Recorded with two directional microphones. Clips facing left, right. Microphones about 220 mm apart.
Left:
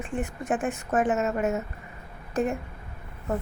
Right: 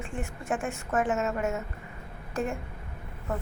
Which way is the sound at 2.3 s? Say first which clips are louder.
Left 5 dB; 20° left (ahead or behind).